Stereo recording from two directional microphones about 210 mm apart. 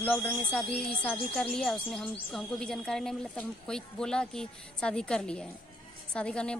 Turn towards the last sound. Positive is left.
turn(degrees=5)  # may be behind; listen again after turning